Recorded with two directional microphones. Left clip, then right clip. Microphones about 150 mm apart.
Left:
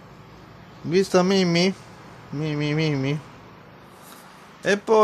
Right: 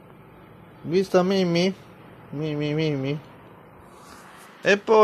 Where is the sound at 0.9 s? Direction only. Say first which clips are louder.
Left 1 dB; 20° left (ahead or behind).